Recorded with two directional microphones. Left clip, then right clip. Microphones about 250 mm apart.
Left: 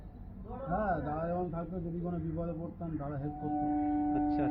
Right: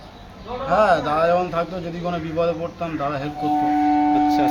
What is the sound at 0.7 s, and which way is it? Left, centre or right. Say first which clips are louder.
Speech: right 17 dB; right.